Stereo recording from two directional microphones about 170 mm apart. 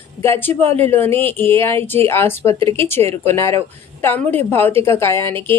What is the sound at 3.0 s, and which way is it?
Speech, 40° right (ahead or behind).